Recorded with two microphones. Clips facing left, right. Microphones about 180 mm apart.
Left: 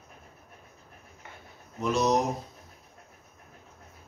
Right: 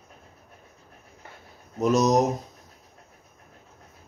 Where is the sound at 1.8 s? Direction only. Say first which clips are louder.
Right 5 dB; 40° right (ahead or behind).